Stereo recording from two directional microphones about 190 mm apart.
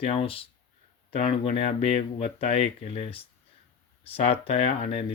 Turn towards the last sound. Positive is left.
turn(degrees=35)  # may be behind; listen again after turning